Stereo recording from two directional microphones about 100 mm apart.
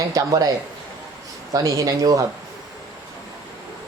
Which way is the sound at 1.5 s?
35° right (ahead or behind).